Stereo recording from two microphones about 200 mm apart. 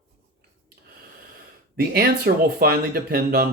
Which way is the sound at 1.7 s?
50° right (ahead or behind).